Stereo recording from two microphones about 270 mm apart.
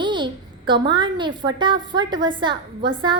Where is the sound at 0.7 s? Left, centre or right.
Centre.